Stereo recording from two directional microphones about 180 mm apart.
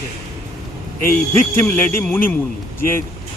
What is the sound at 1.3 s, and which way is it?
Speech, 10° left (ahead or behind).